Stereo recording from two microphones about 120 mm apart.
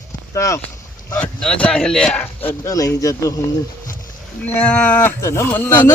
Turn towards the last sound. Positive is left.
turn(degrees=15)  # may be behind; listen again after turning